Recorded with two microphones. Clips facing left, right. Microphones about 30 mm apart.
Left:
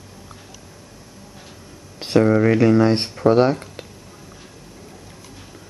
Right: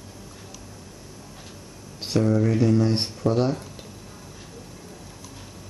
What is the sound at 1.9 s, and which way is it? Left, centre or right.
Speech, left.